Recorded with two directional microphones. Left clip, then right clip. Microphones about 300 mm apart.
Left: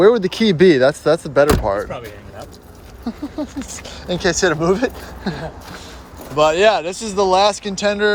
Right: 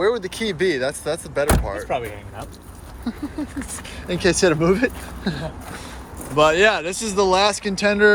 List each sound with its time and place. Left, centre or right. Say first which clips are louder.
0.0 s speech: left 8 dB; left
3.1 s speech: left 3 dB; centre